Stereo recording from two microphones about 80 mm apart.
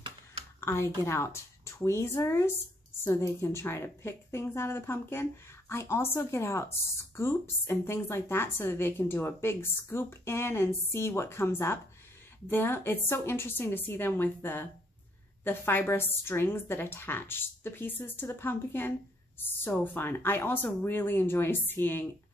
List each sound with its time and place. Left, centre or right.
0.6 s a woman's voice: left